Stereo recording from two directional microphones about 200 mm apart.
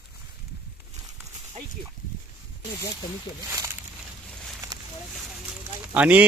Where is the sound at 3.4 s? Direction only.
10° right (ahead or behind).